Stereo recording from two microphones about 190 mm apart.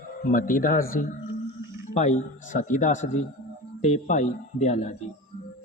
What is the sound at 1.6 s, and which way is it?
Music, 15° right (ahead or behind).